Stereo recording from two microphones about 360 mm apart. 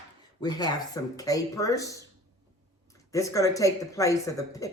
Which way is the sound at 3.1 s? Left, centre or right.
Centre.